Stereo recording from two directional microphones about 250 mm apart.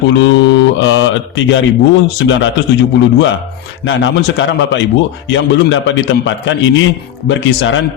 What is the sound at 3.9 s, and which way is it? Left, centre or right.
A man's voice, left.